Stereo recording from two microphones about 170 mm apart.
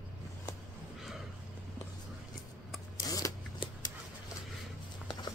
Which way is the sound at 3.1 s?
20° left (ahead or behind).